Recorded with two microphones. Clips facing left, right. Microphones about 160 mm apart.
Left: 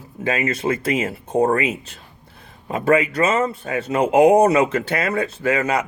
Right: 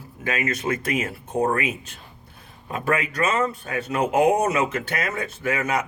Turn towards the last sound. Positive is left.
turn(degrees=30)  # may be behind; listen again after turning